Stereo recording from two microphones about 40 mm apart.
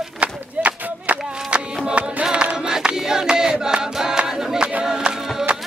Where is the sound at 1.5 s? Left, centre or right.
Right.